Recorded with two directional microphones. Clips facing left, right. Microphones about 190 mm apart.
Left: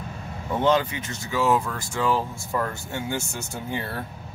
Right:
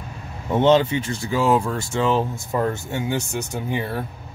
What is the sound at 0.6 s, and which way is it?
Speech, 25° right (ahead or behind).